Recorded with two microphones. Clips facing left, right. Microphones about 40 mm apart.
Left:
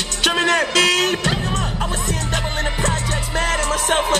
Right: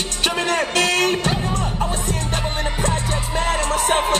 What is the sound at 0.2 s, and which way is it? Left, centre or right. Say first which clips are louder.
Music: left 4 dB; left.